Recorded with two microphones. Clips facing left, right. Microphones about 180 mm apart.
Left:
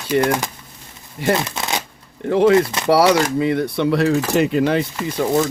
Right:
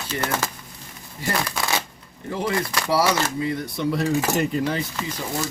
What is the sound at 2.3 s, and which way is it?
Speech, 65° left (ahead or behind).